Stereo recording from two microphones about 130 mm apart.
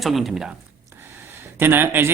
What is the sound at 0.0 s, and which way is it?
Speech, centre (ahead or behind).